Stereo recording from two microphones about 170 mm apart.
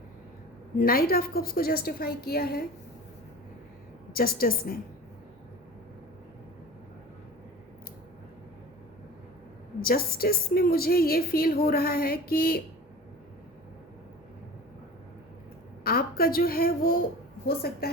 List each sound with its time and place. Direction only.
0.8 s a woman's voice: 60° left (ahead or behind)
4.1 s a woman's voice: 60° left (ahead or behind)
9.8 s a woman's voice: 60° left (ahead or behind)
15.8 s a woman's voice: 65° left (ahead or behind)